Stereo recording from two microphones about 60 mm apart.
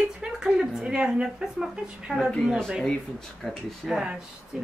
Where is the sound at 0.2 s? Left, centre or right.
Centre.